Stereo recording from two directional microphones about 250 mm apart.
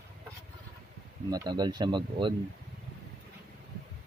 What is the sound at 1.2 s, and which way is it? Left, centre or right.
Speech, centre.